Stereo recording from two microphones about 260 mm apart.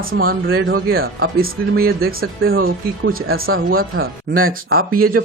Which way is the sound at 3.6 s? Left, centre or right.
Right.